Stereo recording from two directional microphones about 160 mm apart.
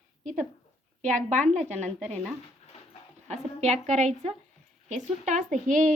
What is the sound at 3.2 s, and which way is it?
A woman's voice, 45° right (ahead or behind).